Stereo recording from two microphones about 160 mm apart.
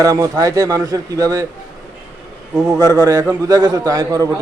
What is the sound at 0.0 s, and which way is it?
Speech, 20° right (ahead or behind).